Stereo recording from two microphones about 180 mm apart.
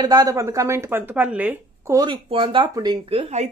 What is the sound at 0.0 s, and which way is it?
Speech, 20° right (ahead or behind).